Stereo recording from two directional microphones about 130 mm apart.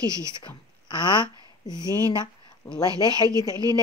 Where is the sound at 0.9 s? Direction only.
35° left (ahead or behind).